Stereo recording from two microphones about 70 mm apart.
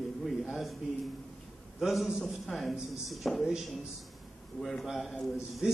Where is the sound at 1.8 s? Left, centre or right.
Centre.